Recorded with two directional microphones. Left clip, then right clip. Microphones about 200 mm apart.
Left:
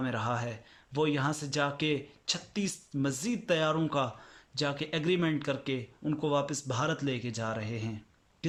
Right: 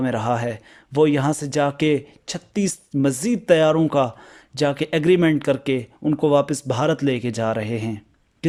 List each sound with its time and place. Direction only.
0.0 s speech: 35° right (ahead or behind)